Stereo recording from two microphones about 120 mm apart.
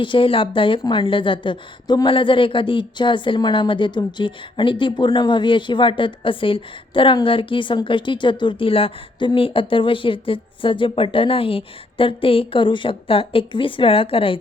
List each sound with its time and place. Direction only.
0.0 s a woman's voice: 45° left (ahead or behind)